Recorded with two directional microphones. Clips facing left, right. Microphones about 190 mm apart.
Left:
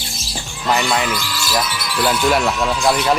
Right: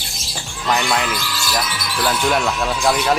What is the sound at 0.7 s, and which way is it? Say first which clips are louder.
Speech: left 1 dB; centre (ahead or behind).